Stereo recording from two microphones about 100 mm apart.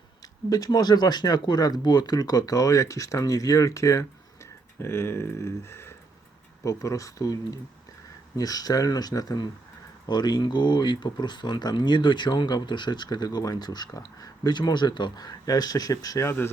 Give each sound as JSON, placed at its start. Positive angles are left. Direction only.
{"t": 0.2, "sound": "speech", "side_deg": 40}
{"t": 16.2, "sound": "speech", "side_deg": 20}